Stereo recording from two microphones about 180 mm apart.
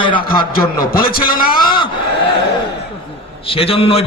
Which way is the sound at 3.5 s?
30° left (ahead or behind).